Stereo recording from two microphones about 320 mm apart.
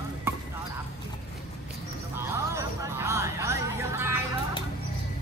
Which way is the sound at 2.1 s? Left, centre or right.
Centre.